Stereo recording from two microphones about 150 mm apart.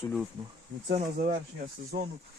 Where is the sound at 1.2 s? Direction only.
65° right (ahead or behind).